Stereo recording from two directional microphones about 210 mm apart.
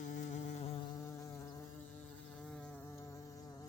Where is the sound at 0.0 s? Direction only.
35° left (ahead or behind).